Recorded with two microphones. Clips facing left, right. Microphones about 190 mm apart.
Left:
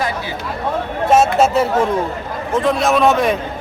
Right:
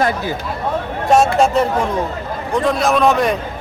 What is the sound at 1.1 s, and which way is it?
A man's voice, 5° left (ahead or behind).